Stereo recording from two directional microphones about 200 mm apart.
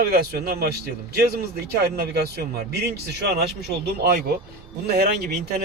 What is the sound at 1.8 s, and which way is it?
Speech, 50° right (ahead or behind).